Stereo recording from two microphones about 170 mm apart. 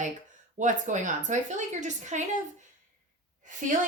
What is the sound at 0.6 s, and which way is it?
A woman's voice, 45° right (ahead or behind).